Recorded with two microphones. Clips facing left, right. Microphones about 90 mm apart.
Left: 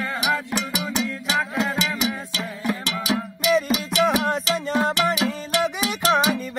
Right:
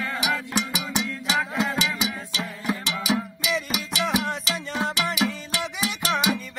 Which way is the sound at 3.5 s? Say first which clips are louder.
Left 7 dB; 40° left (ahead or behind).